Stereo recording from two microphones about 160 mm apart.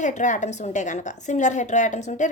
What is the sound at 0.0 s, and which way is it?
A woman's voice, 50° left (ahead or behind).